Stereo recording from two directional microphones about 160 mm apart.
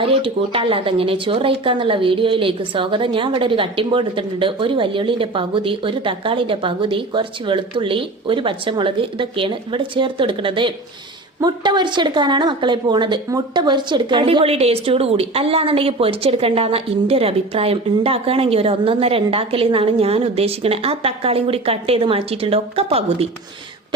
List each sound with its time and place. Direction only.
0.0 s speech: 35° right (ahead or behind)